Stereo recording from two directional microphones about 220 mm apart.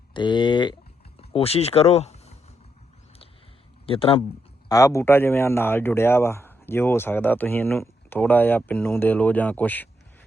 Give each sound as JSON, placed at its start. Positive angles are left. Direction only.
{"t": 0.1, "sound": "speech", "side_deg": 20}
{"t": 3.8, "sound": "speech", "side_deg": 25}
{"t": 4.7, "sound": "speech", "side_deg": 15}